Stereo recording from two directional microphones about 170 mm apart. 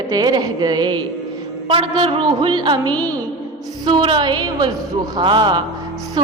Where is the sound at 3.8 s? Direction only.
25° right (ahead or behind).